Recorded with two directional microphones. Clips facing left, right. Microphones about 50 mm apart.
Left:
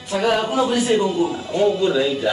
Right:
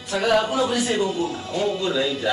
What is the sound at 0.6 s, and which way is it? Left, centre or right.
A man's voice, left.